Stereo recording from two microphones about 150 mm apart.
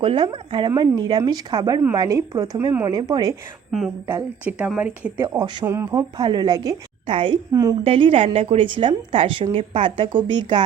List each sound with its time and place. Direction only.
0.0 s a woman's voice: 35° right (ahead or behind)
3.7 s a woman's voice: centre (ahead or behind); by 7.3 s 35° right (ahead or behind)
7.5 s a woman's voice: 25° right (ahead or behind)
7.9 s a woman's voice: 35° right (ahead or behind)